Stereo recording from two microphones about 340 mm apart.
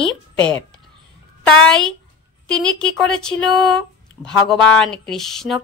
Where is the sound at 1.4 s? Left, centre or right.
Centre.